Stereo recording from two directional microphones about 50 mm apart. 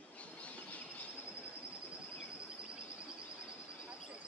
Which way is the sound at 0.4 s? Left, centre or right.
Left.